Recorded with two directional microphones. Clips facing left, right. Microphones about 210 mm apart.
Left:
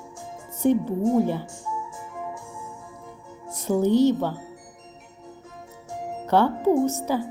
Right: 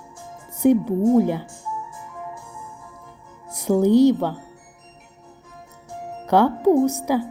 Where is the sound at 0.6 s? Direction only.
10° right (ahead or behind).